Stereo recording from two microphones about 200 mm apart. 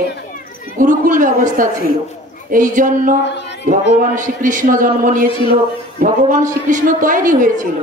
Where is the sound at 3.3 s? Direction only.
60° left (ahead or behind).